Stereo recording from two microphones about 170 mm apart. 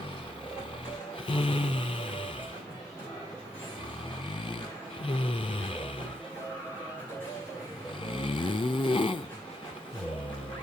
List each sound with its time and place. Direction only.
1.3 s music: 30° left (ahead or behind)
5.0 s a sound: 30° left (ahead or behind)
8.0 s snoring: 30° left (ahead or behind)